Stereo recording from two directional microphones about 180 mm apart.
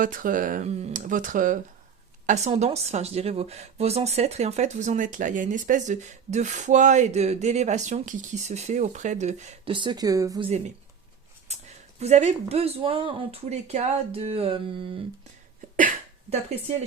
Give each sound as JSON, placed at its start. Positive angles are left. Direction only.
{"t": 0.0, "sound": "speech", "side_deg": -50}
{"t": 9.7, "sound": "speech", "side_deg": -25}
{"t": 11.9, "sound": "speech", "side_deg": -40}